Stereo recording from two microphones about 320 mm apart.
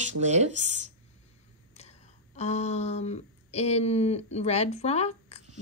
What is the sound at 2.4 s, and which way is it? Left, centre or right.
Speech, centre.